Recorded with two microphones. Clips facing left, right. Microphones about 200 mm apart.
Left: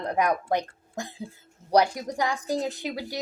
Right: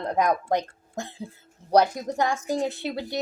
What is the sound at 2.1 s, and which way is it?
Speech, 15° left (ahead or behind).